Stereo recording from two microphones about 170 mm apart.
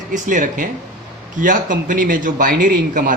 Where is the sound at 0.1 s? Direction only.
50° right (ahead or behind).